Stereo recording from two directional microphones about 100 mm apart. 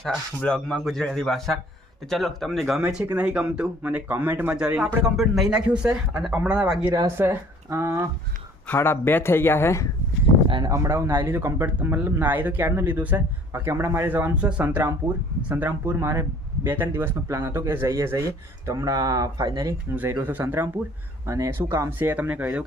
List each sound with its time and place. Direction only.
0.3 s a man's voice: 10° left (ahead or behind); by 6.9 s 10° right (ahead or behind)
7.2 s speech: 25° right (ahead or behind)
8.6 s speech: 20° left (ahead or behind)
10.7 s speech: 30° right (ahead or behind)
20.0 s speech: 25° right (ahead or behind)